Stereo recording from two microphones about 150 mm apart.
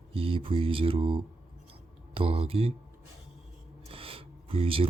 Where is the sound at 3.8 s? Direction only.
40° right (ahead or behind).